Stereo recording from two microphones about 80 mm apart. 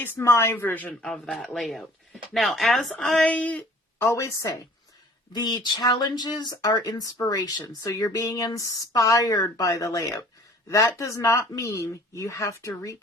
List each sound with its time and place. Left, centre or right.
0.0 s speech: left
1.0 s speech: centre
3.2 s speech: centre
3.9 s a woman's voice: left
5.3 s a woman's voice: left